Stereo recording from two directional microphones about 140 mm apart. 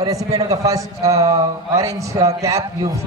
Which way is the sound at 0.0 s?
25° right (ahead or behind).